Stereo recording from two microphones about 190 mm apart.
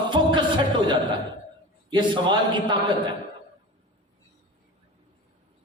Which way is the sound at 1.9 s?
25° right (ahead or behind).